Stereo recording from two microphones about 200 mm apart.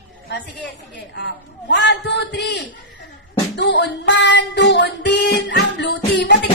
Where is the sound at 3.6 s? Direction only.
60° left (ahead or behind).